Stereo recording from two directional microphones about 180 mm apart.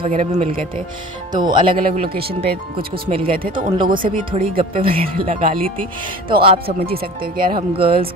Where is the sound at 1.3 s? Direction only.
25° right (ahead or behind).